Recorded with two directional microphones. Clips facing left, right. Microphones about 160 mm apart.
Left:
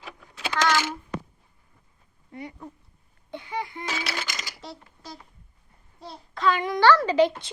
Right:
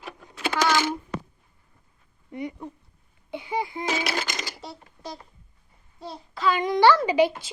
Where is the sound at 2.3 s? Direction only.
20° right (ahead or behind).